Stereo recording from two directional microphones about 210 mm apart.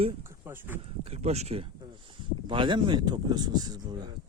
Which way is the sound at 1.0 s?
30° right (ahead or behind).